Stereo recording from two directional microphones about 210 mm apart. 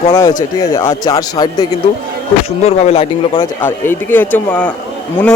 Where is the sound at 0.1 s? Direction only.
20° left (ahead or behind).